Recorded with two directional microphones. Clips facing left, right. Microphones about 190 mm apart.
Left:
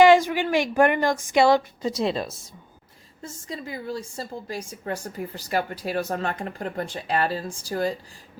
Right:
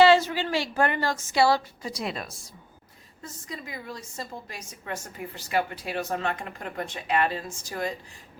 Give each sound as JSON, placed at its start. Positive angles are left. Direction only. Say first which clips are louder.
{"t": 0.0, "sound": "a woman's voice", "louder": "left 3 dB", "side_deg": 15}